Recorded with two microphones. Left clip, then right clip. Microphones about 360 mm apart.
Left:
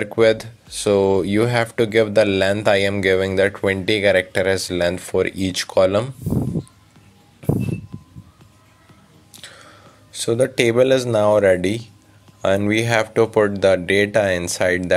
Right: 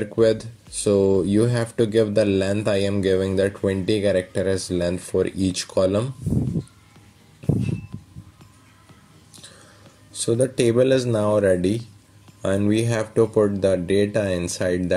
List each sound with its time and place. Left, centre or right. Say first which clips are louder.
0.2 s speech: left 3 dB; left
6.2 s a sound: left 3 dB; left
10.4 s speech: left 3 dB; left